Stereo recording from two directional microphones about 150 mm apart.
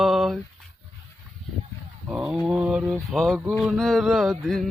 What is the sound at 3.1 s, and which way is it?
Mantra, centre (ahead or behind).